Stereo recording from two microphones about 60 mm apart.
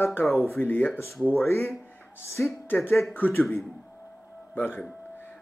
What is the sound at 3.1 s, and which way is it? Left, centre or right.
Speech, left.